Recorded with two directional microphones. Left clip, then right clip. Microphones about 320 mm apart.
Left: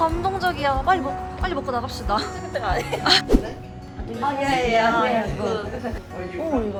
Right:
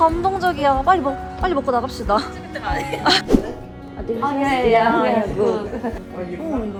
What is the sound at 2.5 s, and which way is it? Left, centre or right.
Speech, centre.